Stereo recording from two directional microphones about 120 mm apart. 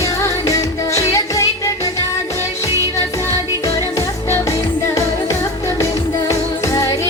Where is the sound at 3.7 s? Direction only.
25° left (ahead or behind).